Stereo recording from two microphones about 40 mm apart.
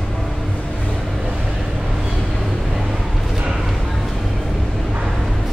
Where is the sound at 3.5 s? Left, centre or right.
Centre.